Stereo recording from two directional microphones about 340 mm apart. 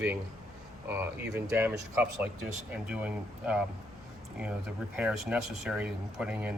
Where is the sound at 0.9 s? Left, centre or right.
Centre.